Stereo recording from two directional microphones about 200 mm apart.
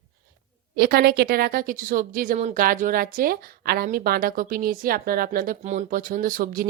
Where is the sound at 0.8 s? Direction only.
50° right (ahead or behind).